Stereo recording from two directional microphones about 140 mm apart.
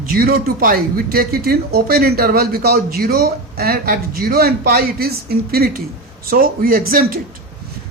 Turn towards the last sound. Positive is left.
turn(degrees=-90)